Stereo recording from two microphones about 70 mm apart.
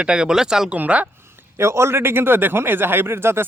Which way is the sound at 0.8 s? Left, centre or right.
Centre.